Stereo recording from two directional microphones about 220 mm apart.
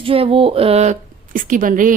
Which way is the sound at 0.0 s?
25° right (ahead or behind).